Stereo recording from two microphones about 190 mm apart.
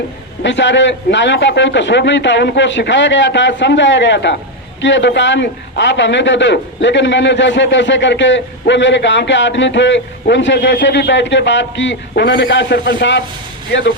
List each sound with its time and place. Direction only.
0.4 s a man's voice: 70° left (ahead or behind)